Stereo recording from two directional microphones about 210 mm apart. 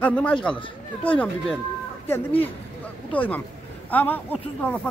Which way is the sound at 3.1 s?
5° left (ahead or behind).